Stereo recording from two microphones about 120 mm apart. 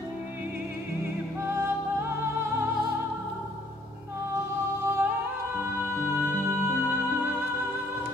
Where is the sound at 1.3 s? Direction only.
20° right (ahead or behind).